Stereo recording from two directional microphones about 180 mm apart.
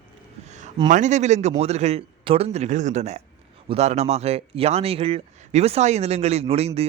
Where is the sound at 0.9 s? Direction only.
40° right (ahead or behind).